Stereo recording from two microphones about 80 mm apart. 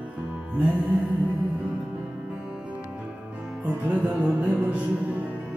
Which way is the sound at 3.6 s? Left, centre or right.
Centre.